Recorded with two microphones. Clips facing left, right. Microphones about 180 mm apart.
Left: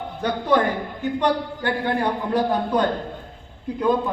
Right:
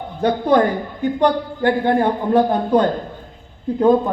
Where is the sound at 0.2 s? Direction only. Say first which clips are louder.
Right 5 dB; 30° right (ahead or behind).